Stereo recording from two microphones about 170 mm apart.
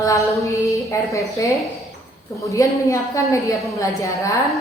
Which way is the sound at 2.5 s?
20° left (ahead or behind).